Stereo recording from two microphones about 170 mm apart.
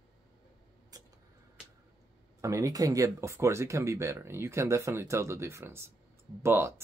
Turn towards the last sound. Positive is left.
turn(degrees=-15)  # may be behind; listen again after turning